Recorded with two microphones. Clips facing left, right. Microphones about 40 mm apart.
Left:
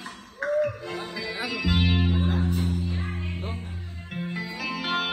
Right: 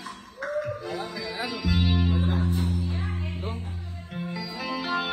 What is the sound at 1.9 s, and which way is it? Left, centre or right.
Music, left.